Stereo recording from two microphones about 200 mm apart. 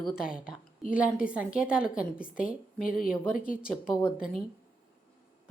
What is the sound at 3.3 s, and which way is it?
Speech, 45° left (ahead or behind).